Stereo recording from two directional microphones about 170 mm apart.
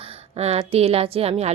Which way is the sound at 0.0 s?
35° right (ahead or behind).